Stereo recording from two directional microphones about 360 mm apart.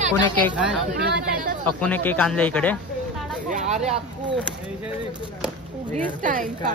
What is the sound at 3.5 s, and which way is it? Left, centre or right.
Speech, centre.